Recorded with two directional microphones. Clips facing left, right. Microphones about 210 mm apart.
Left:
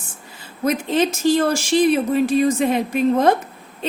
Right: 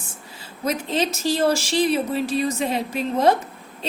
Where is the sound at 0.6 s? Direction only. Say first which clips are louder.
Left 5 dB; 55° left (ahead or behind).